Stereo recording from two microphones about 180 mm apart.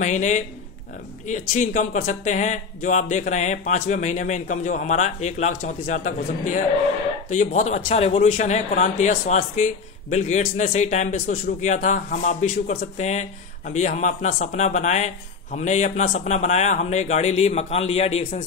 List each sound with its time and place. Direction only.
0.0 s speech: 40° left (ahead or behind)